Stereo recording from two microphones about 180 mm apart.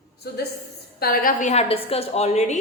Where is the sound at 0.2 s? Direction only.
65° left (ahead or behind); by 2.6 s 40° left (ahead or behind).